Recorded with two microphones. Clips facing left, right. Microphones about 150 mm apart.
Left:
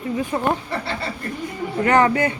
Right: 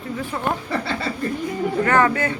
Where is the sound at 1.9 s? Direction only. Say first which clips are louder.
Left 3 dB; 15° left (ahead or behind).